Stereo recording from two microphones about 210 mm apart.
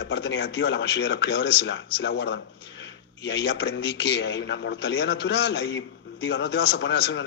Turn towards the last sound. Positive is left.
turn(degrees=55)  # may be behind; listen again after turning